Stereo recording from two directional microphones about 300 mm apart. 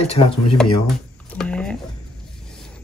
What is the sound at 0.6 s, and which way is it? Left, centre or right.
Speech, centre.